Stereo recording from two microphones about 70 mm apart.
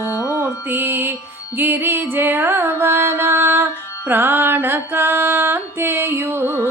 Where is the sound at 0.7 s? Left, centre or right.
Right.